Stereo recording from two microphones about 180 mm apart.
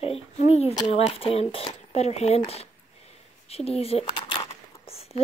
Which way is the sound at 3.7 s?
35° left (ahead or behind).